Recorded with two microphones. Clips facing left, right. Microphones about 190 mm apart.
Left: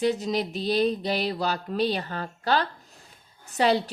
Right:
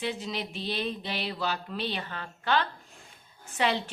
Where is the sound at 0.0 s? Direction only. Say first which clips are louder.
Left 8 dB; 40° left (ahead or behind).